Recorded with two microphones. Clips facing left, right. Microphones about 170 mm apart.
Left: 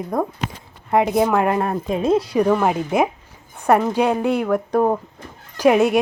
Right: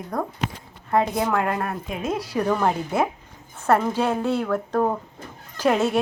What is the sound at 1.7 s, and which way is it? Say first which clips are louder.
Speech: left 9 dB; 35° left (ahead or behind).